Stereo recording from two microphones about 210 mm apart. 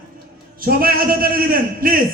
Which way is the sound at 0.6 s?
45° right (ahead or behind).